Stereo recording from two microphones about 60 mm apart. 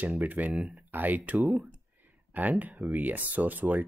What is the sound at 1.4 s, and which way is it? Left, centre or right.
Speech, centre.